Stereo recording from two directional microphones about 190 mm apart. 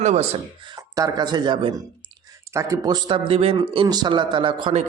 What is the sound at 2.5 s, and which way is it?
Speech, 15° right (ahead or behind).